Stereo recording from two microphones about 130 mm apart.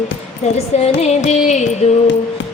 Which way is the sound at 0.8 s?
55° left (ahead or behind).